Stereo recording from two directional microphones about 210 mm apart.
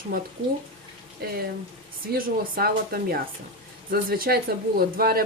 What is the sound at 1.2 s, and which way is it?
Speech, 45° right (ahead or behind).